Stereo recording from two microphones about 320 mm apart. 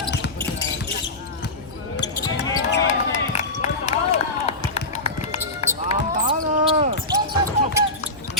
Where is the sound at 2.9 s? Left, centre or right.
Left.